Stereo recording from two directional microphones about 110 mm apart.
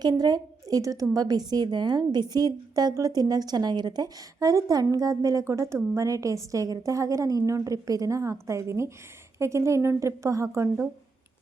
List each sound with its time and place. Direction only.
0.0 s a woman's voice: 35° right (ahead or behind)